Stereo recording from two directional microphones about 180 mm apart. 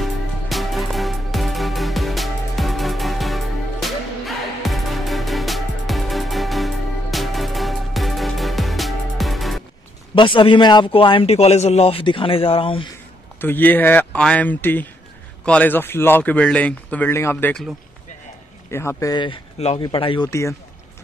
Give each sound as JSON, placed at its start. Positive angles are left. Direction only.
{"t": 0.0, "sound": "music", "side_deg": 0}
{"t": 10.1, "sound": "a man's voice", "side_deg": 25}
{"t": 13.4, "sound": "speech", "side_deg": 10}
{"t": 18.7, "sound": "a man's voice", "side_deg": 15}
{"t": 20.2, "sound": "speech", "side_deg": 15}